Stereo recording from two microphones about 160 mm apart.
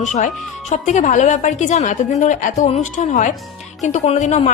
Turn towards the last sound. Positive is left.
turn(degrees=45)  # may be behind; listen again after turning